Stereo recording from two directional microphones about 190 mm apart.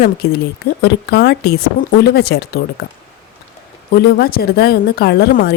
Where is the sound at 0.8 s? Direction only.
60° left (ahead or behind).